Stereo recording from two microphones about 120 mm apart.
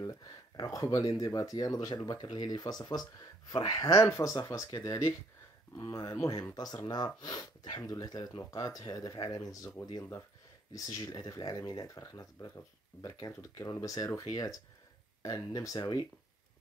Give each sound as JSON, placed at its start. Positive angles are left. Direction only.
{"t": 0.0, "sound": "speech", "side_deg": 30}